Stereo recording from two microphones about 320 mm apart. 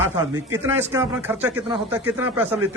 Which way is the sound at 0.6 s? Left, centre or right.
Centre.